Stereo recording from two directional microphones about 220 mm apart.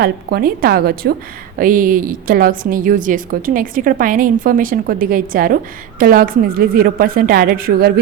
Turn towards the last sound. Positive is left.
turn(degrees=-45)  # may be behind; listen again after turning